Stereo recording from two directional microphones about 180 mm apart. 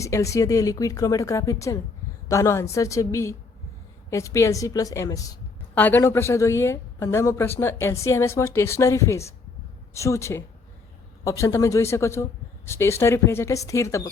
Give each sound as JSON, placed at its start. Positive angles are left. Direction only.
{"t": 0.0, "sound": "a woman's voice", "side_deg": 15}